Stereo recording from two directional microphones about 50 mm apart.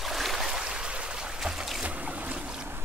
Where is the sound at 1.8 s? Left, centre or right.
Right.